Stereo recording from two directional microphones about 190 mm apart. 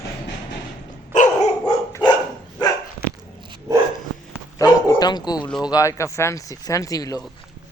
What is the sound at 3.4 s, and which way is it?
Dog, 25° right (ahead or behind).